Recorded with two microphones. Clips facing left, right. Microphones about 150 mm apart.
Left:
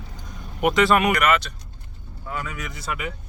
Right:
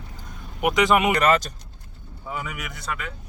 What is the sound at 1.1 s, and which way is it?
Speech, 35° right (ahead or behind).